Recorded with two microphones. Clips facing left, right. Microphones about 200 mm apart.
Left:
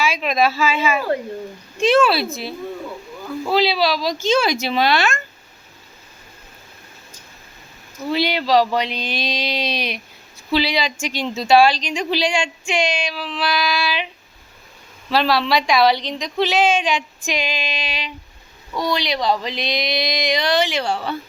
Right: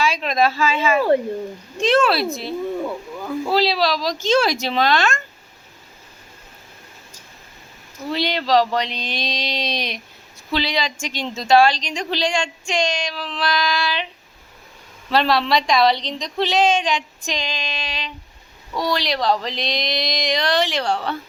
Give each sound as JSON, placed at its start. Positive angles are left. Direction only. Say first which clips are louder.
{"t": 0.0, "sound": "speech", "louder": "even", "side_deg": 5}
{"t": 0.9, "sound": "speech", "louder": "right 5 dB", "side_deg": -25}
{"t": 1.8, "sound": "a woman's voice", "louder": "left 2 dB", "side_deg": 0}
{"t": 8.1, "sound": "a woman's voice", "louder": "left 1 dB", "side_deg": 5}
{"t": 15.1, "sound": "a woman's voice", "louder": "even", "side_deg": 5}